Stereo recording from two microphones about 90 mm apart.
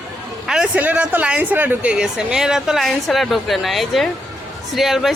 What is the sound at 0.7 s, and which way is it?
Speech, 15° right (ahead or behind).